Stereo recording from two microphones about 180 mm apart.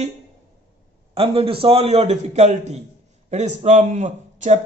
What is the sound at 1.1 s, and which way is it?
A man's voice, 30° right (ahead or behind).